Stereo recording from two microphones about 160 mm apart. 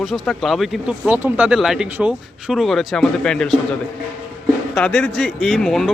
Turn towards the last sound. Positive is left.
turn(degrees=0)  # may be behind; listen again after turning